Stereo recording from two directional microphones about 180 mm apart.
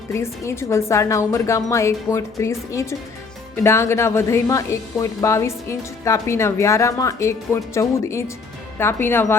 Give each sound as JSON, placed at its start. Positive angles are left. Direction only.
{"t": 0.1, "sound": "speech", "side_deg": 15}